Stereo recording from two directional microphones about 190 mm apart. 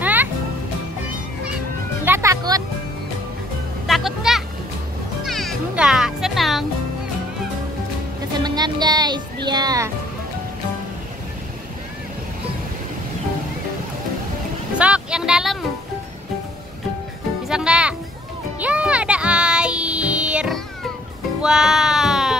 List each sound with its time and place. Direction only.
0.0 s music: 10° right (ahead or behind)
2.0 s music: 15° right (ahead or behind)
3.8 s music: centre (ahead or behind)
8.4 s music: 20° right (ahead or behind)
14.8 s music: 5° right (ahead or behind)
17.5 s music: 5° right (ahead or behind)